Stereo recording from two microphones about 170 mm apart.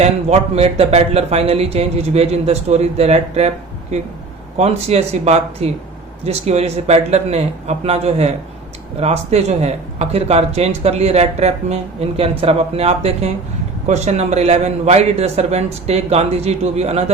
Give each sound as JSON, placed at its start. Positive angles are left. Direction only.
{"t": 0.0, "sound": "speech", "side_deg": -40}
{"t": 4.5, "sound": "speech", "side_deg": -40}